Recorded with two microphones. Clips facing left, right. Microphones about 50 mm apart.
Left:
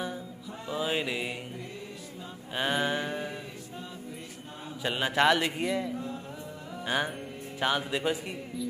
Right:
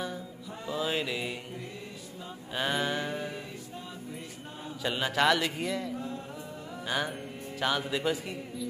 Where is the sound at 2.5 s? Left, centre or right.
Centre.